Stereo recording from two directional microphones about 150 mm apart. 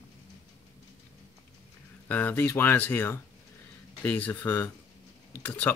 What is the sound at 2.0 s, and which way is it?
Speech, 10° left (ahead or behind).